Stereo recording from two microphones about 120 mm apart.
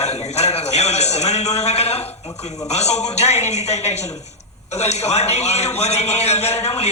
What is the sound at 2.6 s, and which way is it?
A man's voice, 65° left (ahead or behind).